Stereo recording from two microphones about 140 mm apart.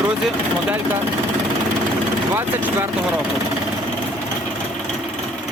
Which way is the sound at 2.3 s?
15° right (ahead or behind).